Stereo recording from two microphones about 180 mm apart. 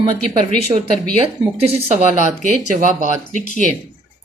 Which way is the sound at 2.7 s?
45° right (ahead or behind).